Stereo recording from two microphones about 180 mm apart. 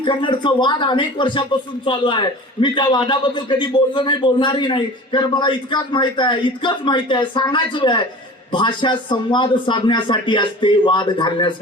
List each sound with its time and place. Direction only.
0.0 s a man's voice: 25° left (ahead or behind)